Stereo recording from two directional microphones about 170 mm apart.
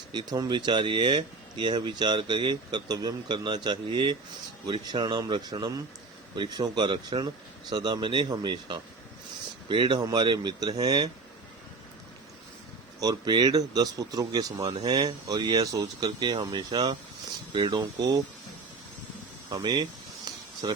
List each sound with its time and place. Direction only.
0.1 s speech: 25° right (ahead or behind)
13.0 s speech: 25° right (ahead or behind)
19.5 s speech: 25° right (ahead or behind)
20.2 s a sound: 25° right (ahead or behind)